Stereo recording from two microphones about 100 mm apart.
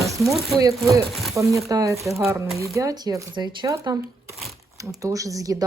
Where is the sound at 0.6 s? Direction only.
35° right (ahead or behind).